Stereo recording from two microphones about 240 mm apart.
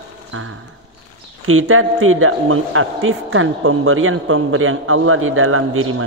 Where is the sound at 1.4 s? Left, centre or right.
Right.